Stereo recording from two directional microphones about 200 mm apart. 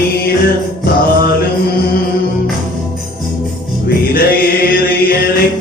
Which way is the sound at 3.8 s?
50° left (ahead or behind).